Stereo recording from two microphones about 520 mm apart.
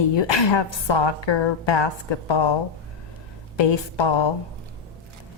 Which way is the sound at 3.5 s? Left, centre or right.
Left.